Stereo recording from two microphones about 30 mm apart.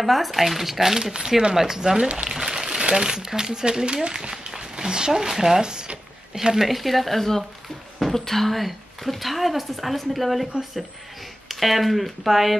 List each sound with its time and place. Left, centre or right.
0.0 s speech: centre
2.2 s crumpling: centre
2.8 s crumpling: right
3.1 s speech: right
4.3 s a sound: right
5.3 s speech: centre
5.6 s speech: right
6.5 s speech: centre